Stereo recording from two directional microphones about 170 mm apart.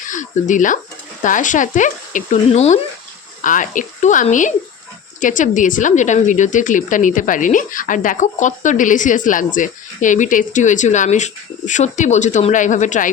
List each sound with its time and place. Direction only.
0.1 s a woman's voice: 50° left (ahead or behind)
3.4 s a woman's voice: 50° left (ahead or behind)